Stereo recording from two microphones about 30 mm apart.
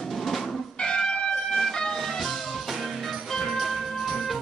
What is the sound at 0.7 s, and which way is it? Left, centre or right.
Music, left.